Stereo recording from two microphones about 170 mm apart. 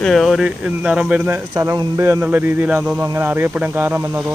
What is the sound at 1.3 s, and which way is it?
Speech, 15° right (ahead or behind).